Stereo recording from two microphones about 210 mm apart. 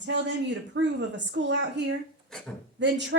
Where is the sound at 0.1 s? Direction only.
60° right (ahead or behind).